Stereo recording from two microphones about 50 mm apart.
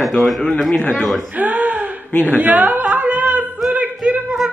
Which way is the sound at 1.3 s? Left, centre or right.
Right.